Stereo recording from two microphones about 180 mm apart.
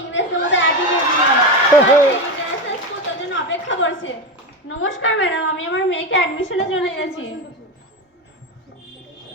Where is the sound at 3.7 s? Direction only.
90° left.